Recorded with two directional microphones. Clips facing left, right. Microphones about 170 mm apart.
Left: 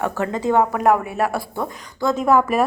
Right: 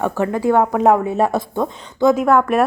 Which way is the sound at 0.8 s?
25° right (ahead or behind).